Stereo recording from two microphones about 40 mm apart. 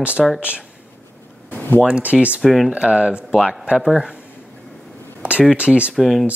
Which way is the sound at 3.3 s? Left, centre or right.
Centre.